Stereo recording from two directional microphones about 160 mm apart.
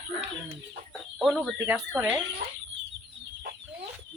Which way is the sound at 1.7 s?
10° right (ahead or behind).